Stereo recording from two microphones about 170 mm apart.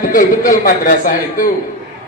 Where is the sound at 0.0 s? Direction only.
50° left (ahead or behind).